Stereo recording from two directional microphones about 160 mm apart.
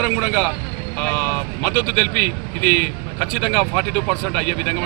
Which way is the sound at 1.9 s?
50° left (ahead or behind).